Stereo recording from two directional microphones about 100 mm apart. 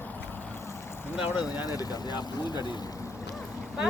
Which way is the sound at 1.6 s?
40° left (ahead or behind).